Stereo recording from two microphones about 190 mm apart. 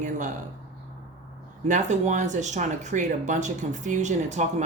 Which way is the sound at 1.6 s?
40° right (ahead or behind).